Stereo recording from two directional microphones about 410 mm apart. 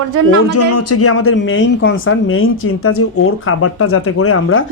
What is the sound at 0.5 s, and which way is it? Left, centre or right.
Speech, left.